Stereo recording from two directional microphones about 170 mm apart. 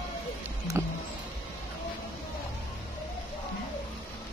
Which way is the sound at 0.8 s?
15° right (ahead or behind).